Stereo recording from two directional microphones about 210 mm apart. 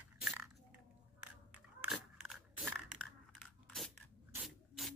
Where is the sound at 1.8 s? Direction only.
5° right (ahead or behind).